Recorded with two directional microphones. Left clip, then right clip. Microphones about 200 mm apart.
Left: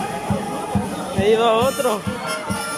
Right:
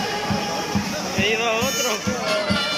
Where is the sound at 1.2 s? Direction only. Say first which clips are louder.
Left 6 dB; 20° left (ahead or behind).